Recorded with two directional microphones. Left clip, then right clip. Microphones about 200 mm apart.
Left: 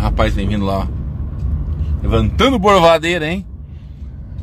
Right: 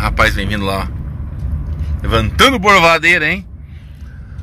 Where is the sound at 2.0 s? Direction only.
10° left (ahead or behind).